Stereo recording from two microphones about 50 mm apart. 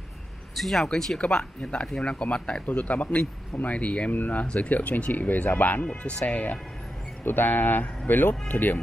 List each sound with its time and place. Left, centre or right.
0.6 s speech: centre
2.6 s speech: left
4.1 s speech: left